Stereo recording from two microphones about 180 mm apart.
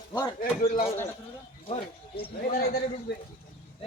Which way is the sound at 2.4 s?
55° left (ahead or behind).